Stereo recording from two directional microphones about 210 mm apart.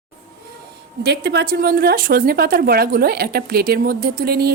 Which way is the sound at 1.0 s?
55° right (ahead or behind).